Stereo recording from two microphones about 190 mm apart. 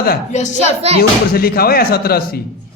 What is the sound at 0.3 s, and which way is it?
Speech, 40° left (ahead or behind).